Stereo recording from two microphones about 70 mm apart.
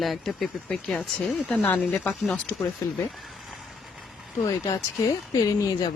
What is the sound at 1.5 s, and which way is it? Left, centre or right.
Speech, left.